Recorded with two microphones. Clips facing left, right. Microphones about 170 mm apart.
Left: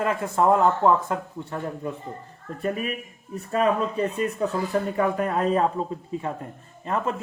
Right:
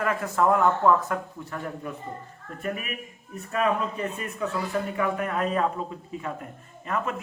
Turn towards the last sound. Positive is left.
turn(degrees=30)  # may be behind; listen again after turning